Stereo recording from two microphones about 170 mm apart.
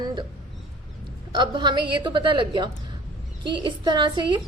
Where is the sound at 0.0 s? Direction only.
25° right (ahead or behind).